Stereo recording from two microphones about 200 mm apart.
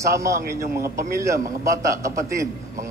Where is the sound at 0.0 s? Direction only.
15° right (ahead or behind).